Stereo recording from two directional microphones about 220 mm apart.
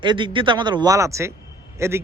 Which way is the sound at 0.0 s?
20° right (ahead or behind).